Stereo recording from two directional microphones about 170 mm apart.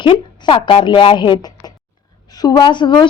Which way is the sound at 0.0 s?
30° left (ahead or behind).